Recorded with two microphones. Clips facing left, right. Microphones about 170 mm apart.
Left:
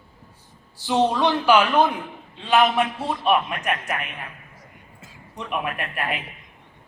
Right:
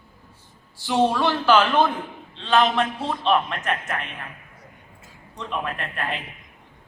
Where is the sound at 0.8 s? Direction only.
20° left (ahead or behind).